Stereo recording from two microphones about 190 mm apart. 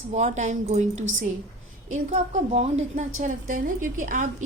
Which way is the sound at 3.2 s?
45° right (ahead or behind).